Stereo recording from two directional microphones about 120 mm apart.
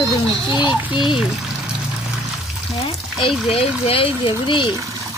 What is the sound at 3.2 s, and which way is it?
Speech, 55° left (ahead or behind).